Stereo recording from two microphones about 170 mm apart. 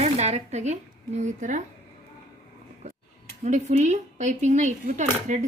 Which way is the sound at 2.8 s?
40° right (ahead or behind).